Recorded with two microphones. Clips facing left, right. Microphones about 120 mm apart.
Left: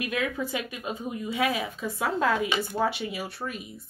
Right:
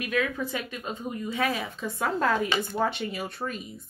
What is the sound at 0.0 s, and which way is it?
Speech, 15° left (ahead or behind).